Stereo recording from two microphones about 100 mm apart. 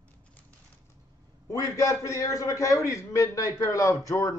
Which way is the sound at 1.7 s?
30° left (ahead or behind).